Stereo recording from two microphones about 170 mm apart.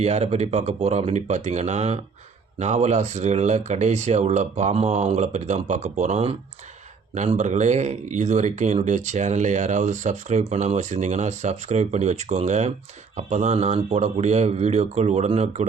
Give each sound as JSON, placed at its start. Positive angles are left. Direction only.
{"t": 0.0, "sound": "speech", "side_deg": -40}